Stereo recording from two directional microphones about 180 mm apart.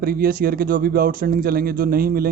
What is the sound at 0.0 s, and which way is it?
Speech, 55° right (ahead or behind).